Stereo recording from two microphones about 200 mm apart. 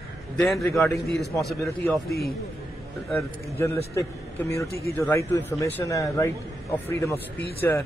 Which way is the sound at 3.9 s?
15° left (ahead or behind).